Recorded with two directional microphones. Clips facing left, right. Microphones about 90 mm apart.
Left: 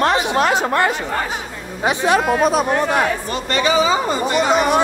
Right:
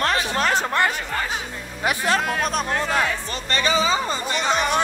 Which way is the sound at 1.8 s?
25° left (ahead or behind).